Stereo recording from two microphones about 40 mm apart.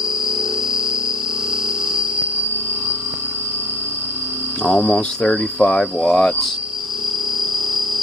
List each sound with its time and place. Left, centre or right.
4.8 s speech: left
5.6 s speech: left
5.9 s speech: centre